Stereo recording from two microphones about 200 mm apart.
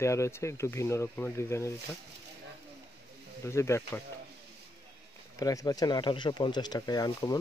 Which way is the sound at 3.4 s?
15° left (ahead or behind).